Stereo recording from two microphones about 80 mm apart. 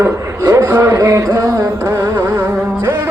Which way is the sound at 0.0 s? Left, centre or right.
Right.